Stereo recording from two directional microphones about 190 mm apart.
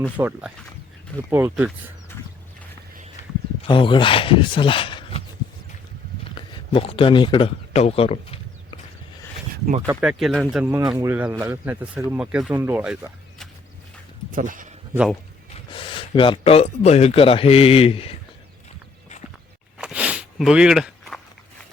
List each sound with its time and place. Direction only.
0.2 s speech: 5° right (ahead or behind)
3.7 s speech: 25° left (ahead or behind)
6.7 s speech: 30° left (ahead or behind)
10.0 s speech: 5° right (ahead or behind)
10.6 s speech: 15° right (ahead or behind)
14.3 s speech: 45° right (ahead or behind)
14.9 s speech: 5° right (ahead or behind)
15.5 s speech: 30° left (ahead or behind)
19.8 s walk: 5° right (ahead or behind)